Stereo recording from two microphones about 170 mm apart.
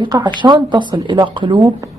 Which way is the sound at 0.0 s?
25° right (ahead or behind).